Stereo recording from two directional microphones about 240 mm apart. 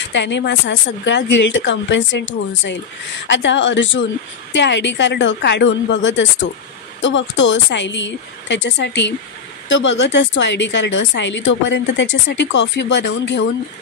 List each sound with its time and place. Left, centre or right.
0.1 s a woman's voice: left